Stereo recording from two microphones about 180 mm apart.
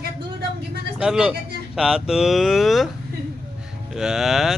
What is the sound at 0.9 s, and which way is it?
Speech, 5° right (ahead or behind).